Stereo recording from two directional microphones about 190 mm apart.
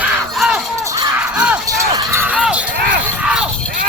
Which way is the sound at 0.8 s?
15° right (ahead or behind).